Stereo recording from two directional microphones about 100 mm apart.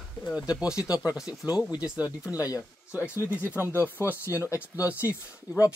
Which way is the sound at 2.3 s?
35° left (ahead or behind).